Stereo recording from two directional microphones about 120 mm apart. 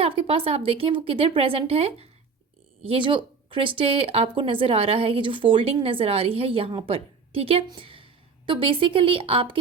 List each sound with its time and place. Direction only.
0.0 s a woman's voice: 50° right (ahead or behind)